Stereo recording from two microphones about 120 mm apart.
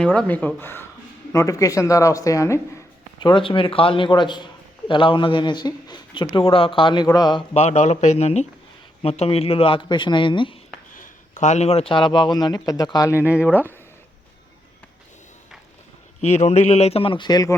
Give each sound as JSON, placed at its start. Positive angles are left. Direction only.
{"t": 0.0, "sound": "speech", "side_deg": 10}
{"t": 3.2, "sound": "speech", "side_deg": 40}
{"t": 7.5, "sound": "a man's voice", "side_deg": 60}
{"t": 11.0, "sound": "speech", "side_deg": 85}
{"t": 13.2, "sound": "speech", "side_deg": -10}
{"t": 16.2, "sound": "a man's voice", "side_deg": 65}